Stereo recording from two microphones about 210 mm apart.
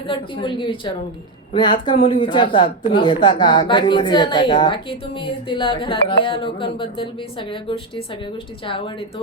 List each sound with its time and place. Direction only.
0.0 s a woman's voice: 25° left (ahead or behind)